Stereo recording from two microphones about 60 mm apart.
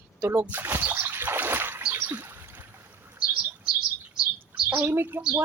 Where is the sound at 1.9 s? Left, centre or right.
Right.